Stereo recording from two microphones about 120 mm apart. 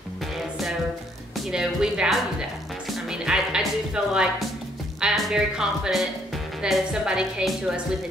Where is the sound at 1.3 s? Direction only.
5° right (ahead or behind).